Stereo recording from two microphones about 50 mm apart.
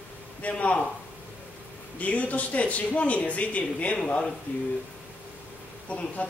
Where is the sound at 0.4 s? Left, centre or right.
Left.